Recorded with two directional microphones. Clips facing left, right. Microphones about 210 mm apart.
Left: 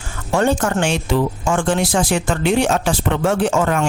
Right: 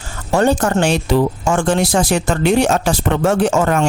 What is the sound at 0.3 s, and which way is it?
Speech, 40° right (ahead or behind).